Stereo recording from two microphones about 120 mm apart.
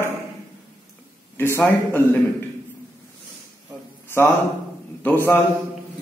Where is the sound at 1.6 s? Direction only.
15° left (ahead or behind).